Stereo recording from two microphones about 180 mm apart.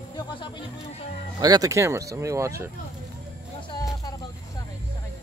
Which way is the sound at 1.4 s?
20° right (ahead or behind).